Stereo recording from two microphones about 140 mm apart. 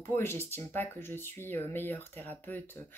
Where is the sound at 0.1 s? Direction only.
15° left (ahead or behind).